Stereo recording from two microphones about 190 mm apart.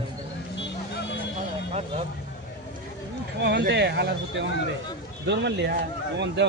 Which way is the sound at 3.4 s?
60° right (ahead or behind).